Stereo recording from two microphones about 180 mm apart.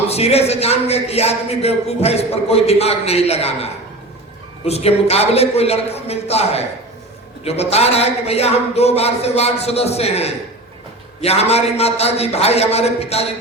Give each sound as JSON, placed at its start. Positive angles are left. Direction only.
{"t": 0.1, "sound": "speech", "side_deg": 35}